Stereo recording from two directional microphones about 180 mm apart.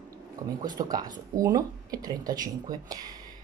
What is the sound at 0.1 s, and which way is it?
Speech, 20° right (ahead or behind).